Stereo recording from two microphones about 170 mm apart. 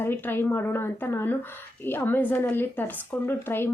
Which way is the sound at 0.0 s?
15° left (ahead or behind).